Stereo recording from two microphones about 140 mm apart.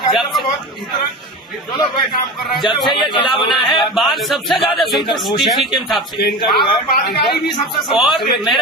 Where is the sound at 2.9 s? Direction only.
35° left (ahead or behind).